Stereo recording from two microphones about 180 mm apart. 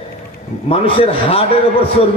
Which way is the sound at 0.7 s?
30° left (ahead or behind).